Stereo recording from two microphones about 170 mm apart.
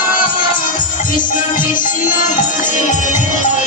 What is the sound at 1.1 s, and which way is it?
Music, 50° left (ahead or behind).